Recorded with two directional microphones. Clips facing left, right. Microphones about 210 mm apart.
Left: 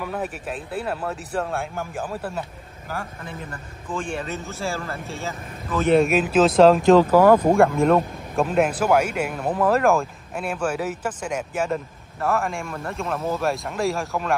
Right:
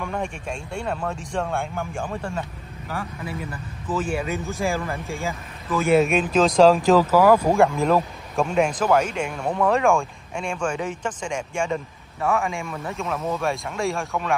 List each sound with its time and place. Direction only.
0.0 s a man's voice: 5° left (ahead or behind)
6.0 s a man's voice: 5° left (ahead or behind)
7.1 s speech: 50° left (ahead or behind)
7.3 s a man's voice: centre (ahead or behind)